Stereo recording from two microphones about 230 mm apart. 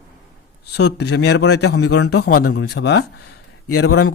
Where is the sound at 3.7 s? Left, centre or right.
Left.